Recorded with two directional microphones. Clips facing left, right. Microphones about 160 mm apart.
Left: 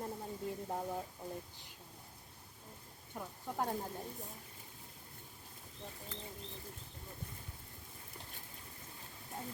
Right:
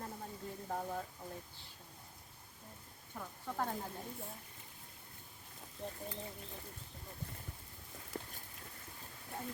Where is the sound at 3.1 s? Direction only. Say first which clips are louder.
Left 1 dB; 20° left (ahead or behind).